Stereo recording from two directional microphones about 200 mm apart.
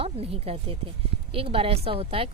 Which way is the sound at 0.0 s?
30° right (ahead or behind).